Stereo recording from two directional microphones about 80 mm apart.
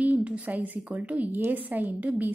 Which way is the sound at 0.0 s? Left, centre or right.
Centre.